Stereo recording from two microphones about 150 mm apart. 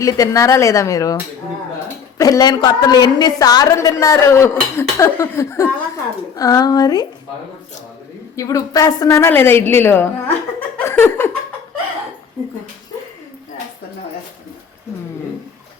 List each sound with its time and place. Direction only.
0.0 s a woman's voice: 20° left (ahead or behind)
8.4 s a woman's voice: 20° left (ahead or behind)
10.8 s laughter: 15° left (ahead or behind)